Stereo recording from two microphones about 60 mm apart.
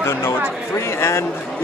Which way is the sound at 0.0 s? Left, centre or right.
Left.